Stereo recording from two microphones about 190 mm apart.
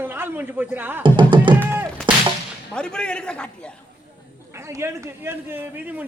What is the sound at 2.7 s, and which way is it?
Speech, 5° left (ahead or behind).